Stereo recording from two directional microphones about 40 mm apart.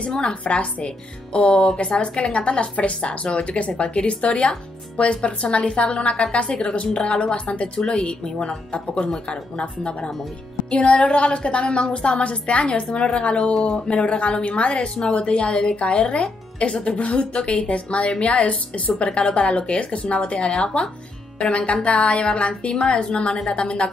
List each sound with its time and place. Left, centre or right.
0.1 s a woman's voice: centre
0.4 s a woman's voice: left
7.8 s a woman's voice: centre; by 19.0 s left
19.0 s a woman's voice: left